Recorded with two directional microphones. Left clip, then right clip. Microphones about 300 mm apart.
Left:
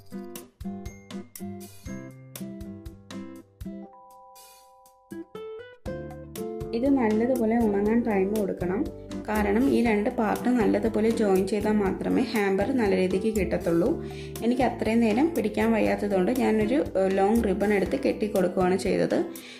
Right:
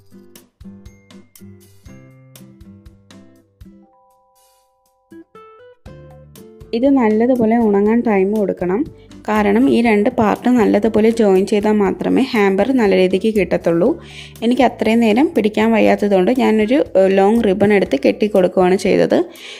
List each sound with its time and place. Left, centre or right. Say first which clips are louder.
0.3 s music: left 3 dB; centre
5.0 s music: left 1 dB; centre
6.7 s speech: right 10 dB; right